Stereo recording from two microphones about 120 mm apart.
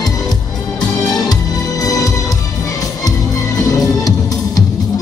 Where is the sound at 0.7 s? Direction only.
30° left (ahead or behind).